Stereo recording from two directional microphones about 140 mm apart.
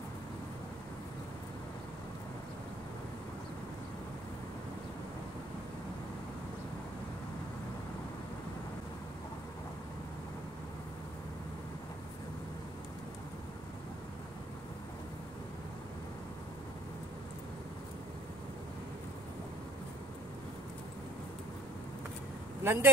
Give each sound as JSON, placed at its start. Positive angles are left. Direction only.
{"t": 22.6, "sound": "speech", "side_deg": -15}